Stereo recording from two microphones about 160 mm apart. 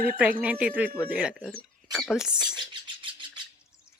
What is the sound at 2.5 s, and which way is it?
Bird, 30° right (ahead or behind).